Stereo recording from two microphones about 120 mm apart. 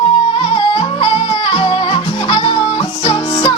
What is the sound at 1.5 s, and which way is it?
Music, 45° left (ahead or behind).